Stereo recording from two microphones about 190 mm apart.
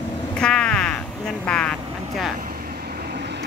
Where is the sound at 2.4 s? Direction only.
50° right (ahead or behind).